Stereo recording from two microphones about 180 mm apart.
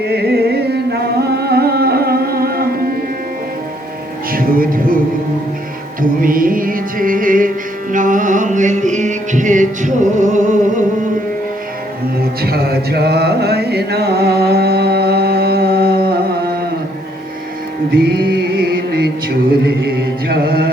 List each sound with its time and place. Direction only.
0.1 s music: 60° right (ahead or behind)
4.3 s music: 50° right (ahead or behind)
6.0 s music: 50° right (ahead or behind)
12.4 s mantra: 60° right (ahead or behind)
17.9 s music: 60° right (ahead or behind)
19.6 s music: 60° right (ahead or behind)